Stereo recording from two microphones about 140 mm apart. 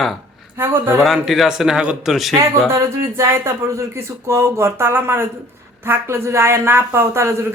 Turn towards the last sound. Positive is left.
turn(degrees=-20)  # may be behind; listen again after turning